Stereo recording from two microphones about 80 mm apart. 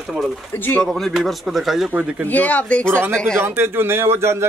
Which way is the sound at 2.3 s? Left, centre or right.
Centre.